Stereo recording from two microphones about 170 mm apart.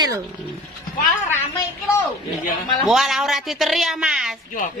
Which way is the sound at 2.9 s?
Centre (ahead or behind).